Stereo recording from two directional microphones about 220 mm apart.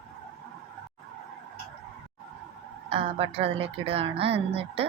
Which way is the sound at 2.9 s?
25° right (ahead or behind).